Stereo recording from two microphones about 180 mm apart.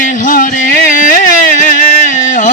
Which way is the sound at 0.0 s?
45° left (ahead or behind).